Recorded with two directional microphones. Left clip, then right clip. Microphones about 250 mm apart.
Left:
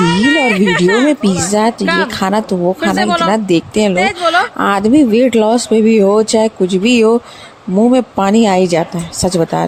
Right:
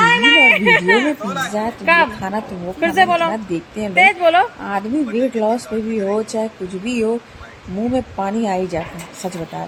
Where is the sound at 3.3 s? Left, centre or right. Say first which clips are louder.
Left 11 dB; left.